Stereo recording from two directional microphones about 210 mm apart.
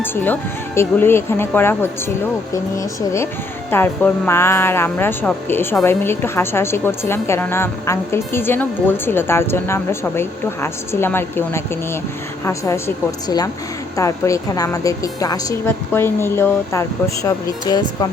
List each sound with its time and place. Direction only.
0.0 s speech: 10° left (ahead or behind)